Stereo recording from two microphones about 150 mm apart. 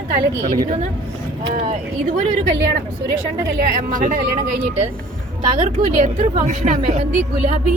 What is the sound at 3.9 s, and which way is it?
Speech, 65° right (ahead or behind).